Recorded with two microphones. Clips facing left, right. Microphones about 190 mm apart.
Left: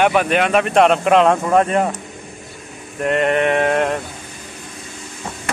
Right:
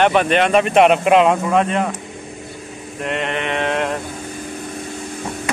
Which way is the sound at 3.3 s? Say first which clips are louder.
Left 5 dB; 45° left (ahead or behind).